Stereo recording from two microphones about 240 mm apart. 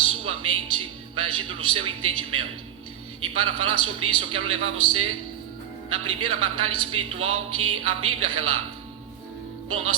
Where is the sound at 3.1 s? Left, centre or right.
Right.